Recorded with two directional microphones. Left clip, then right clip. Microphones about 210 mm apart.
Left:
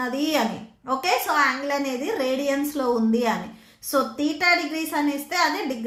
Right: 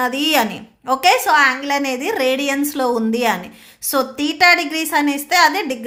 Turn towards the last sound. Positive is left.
turn(degrees=-50)  # may be behind; listen again after turning